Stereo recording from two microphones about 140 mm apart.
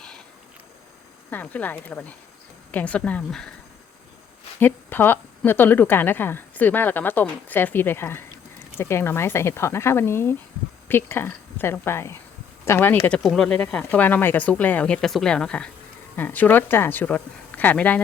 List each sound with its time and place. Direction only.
1.3 s a woman's voice: 15° left (ahead or behind)
4.6 s a woman's voice: 15° left (ahead or behind)